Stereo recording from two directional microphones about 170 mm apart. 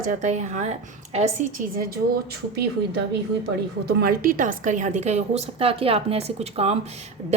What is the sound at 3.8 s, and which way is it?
A woman's voice, 60° right (ahead or behind).